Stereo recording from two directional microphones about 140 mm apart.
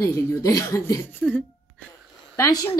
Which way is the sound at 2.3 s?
25° left (ahead or behind).